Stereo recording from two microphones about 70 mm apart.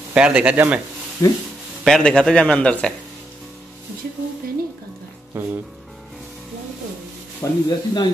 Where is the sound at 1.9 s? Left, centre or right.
Centre.